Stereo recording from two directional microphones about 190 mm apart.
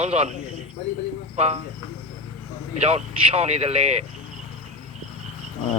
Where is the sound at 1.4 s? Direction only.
30° right (ahead or behind).